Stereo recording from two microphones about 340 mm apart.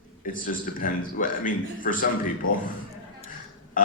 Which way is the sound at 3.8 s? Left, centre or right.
Left.